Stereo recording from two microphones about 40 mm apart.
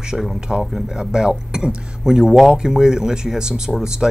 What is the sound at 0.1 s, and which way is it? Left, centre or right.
Speech, centre.